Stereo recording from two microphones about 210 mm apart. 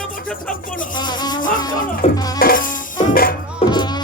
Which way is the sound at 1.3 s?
40° left (ahead or behind).